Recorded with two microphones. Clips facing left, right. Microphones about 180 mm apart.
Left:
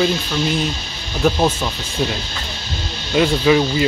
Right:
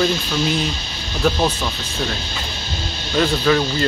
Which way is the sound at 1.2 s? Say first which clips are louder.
Left 2 dB; 10° left (ahead or behind).